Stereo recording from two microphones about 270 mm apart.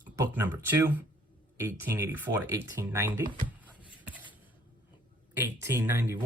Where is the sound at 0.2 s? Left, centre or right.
Centre.